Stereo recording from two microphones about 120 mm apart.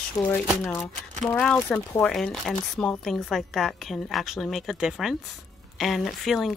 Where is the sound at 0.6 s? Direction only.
25° left (ahead or behind).